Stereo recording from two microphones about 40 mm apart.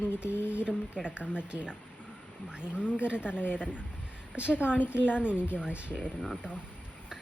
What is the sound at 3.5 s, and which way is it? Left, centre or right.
Speech, right.